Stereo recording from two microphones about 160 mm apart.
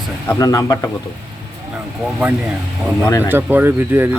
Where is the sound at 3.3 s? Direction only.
10° right (ahead or behind).